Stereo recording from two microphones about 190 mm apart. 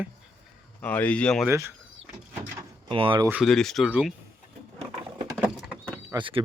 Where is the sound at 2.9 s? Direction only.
25° right (ahead or behind).